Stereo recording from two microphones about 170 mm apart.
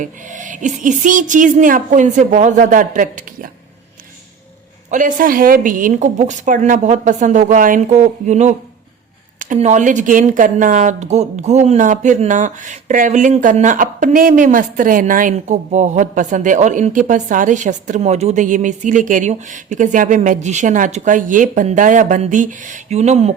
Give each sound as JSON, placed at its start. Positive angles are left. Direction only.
{"t": 0.0, "sound": "speech", "side_deg": -50}
{"t": 4.9, "sound": "speech", "side_deg": -50}